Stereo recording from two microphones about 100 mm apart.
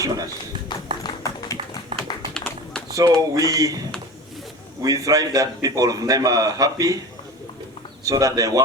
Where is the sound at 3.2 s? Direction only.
35° right (ahead or behind).